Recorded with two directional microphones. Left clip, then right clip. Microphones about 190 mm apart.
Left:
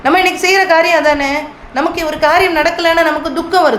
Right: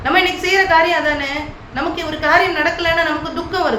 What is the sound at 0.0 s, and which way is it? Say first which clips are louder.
A woman's voice: left 4 dB; 50° left (ahead or behind).